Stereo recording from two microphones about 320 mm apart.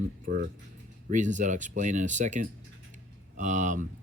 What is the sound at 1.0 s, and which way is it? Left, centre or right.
Speech, right.